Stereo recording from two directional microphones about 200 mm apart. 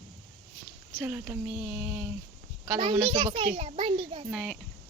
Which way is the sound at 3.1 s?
25° right (ahead or behind).